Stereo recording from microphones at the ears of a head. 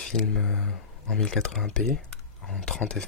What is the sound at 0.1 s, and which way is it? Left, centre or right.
Speech, left.